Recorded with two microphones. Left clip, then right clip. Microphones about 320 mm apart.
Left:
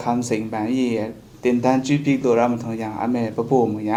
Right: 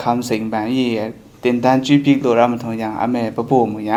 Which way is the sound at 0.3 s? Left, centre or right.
Right.